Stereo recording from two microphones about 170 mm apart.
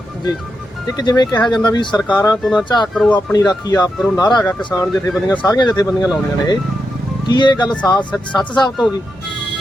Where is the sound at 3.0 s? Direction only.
5° left (ahead or behind).